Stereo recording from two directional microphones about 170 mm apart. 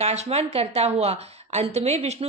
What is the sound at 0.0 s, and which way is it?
A woman's voice, 40° right (ahead or behind).